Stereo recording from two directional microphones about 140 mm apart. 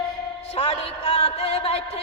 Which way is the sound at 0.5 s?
45° left (ahead or behind).